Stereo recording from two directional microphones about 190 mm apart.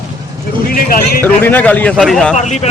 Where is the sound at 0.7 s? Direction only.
50° left (ahead or behind).